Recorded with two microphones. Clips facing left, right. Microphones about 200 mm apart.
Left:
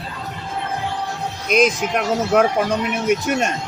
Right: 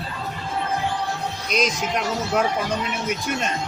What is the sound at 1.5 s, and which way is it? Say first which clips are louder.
Speech: left 7 dB; 55° left (ahead or behind).